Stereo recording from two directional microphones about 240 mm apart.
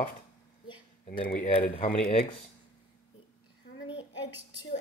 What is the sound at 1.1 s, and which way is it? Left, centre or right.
Speech, left.